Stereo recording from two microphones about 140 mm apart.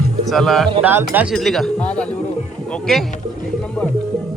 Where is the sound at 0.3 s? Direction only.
Centre (ahead or behind).